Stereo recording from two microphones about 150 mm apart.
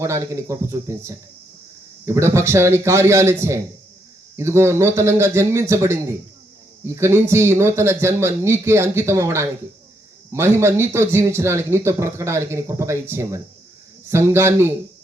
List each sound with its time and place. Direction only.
0.0 s speech: 20° right (ahead or behind)
4.4 s speech: 20° right (ahead or behind)